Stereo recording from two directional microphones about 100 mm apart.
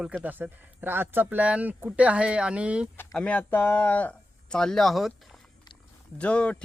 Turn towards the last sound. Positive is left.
turn(degrees=10)  # may be behind; listen again after turning